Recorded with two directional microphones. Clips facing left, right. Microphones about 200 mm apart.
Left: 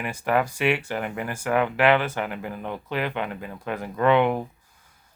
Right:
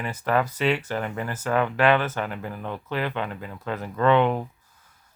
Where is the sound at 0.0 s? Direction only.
15° left (ahead or behind).